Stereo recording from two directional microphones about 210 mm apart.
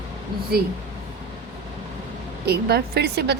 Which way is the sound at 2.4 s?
50° right (ahead or behind).